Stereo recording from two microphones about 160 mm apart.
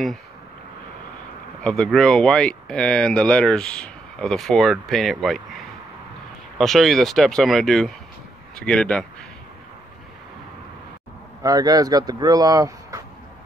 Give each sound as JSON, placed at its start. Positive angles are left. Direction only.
{"t": 1.6, "sound": "speech", "side_deg": 5}
{"t": 6.6, "sound": "speech", "side_deg": 0}
{"t": 11.4, "sound": "speech", "side_deg": -25}